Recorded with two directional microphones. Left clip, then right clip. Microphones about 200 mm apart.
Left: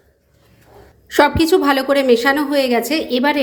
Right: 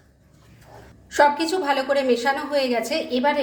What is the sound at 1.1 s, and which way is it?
A woman's voice, 45° left (ahead or behind).